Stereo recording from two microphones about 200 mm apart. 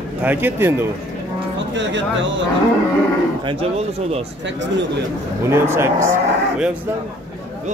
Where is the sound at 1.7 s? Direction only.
65° right (ahead or behind).